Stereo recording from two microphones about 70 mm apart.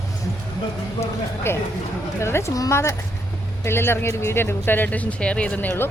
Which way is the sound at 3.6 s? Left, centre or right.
Left.